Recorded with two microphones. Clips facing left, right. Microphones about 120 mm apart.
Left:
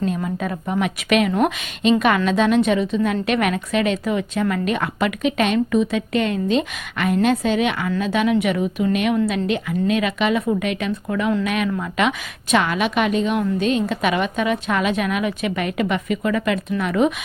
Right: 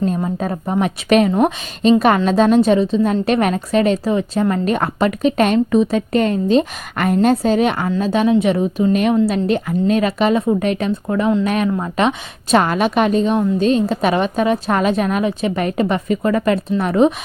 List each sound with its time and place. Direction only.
0.0 s a woman's voice: 35° right (ahead or behind)